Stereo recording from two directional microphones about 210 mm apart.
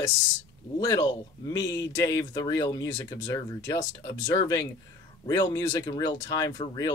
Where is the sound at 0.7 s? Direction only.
15° left (ahead or behind).